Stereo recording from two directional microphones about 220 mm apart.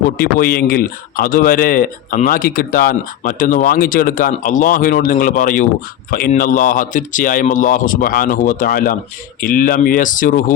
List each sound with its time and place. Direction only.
0.2 s speech: 40° left (ahead or behind)